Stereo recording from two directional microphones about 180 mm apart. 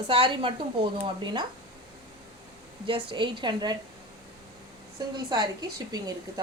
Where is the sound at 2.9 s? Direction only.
25° right (ahead or behind).